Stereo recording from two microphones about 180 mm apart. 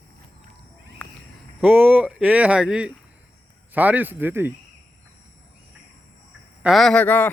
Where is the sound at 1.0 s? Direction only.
10° left (ahead or behind).